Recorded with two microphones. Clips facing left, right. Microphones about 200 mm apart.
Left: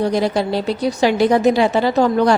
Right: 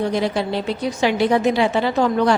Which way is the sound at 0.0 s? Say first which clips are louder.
Left 3 dB; 40° left (ahead or behind).